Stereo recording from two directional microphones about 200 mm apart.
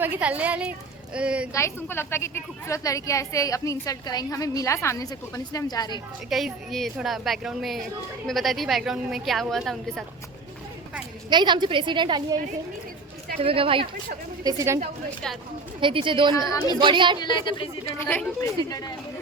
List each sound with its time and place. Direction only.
0.0 s a woman's voice: 10° right (ahead or behind)
1.5 s a woman's voice: 15° left (ahead or behind)
6.3 s a woman's voice: centre (ahead or behind)
11.3 s a woman's voice: 20° right (ahead or behind)
13.4 s a woman's voice: 30° right (ahead or behind)
14.4 s speech: 15° right (ahead or behind)
15.8 s a woman's voice: 25° right (ahead or behind)
16.5 s a woman's voice: 15° left (ahead or behind)
16.7 s a woman's voice: 25° right (ahead or behind)
17.2 s speech: 25° left (ahead or behind)
17.9 s a woman's voice: 10° left (ahead or behind)